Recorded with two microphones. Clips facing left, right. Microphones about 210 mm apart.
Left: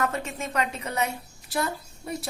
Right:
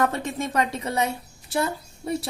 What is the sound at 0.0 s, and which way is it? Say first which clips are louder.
Speech: right 4 dB; 30° right (ahead or behind).